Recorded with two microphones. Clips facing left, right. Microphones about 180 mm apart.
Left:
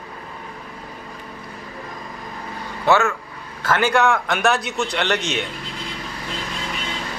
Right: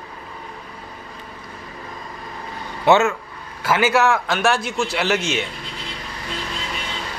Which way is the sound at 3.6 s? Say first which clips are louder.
Right 1 dB; 10° right (ahead or behind).